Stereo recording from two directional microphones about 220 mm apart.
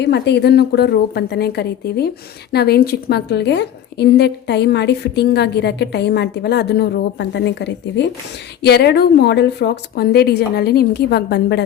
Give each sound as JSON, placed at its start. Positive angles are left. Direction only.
{"t": 0.0, "sound": "a woman's voice", "side_deg": 50}